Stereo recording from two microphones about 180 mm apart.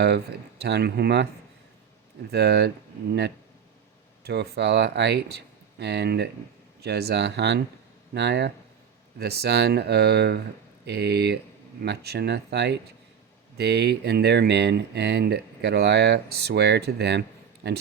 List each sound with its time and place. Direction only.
0.6 s speech: 65° right (ahead or behind)
2.3 s speech: 65° right (ahead or behind)
4.2 s speech: 65° right (ahead or behind)